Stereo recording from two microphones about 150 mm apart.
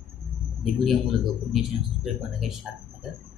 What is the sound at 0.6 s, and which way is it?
Speech, centre (ahead or behind).